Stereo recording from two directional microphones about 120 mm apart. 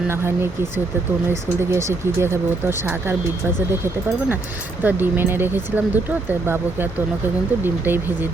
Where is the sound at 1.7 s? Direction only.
20° right (ahead or behind).